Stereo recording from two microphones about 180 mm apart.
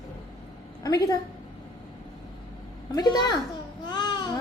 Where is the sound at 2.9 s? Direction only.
20° left (ahead or behind).